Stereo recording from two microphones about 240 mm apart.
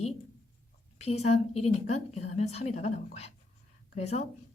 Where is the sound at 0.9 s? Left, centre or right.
Left.